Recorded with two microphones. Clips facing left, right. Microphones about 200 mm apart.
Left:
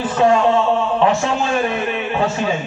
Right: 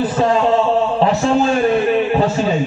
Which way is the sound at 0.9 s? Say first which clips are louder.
Right 2 dB; 35° right (ahead or behind).